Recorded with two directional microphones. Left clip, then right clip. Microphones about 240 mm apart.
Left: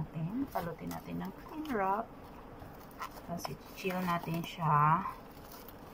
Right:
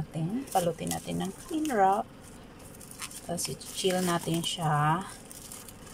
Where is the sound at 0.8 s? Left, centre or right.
Right.